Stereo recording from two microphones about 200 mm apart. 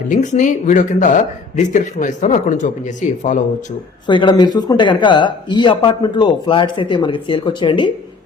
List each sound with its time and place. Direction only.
0.1 s speech: 40° left (ahead or behind)
4.0 s speech: 25° left (ahead or behind)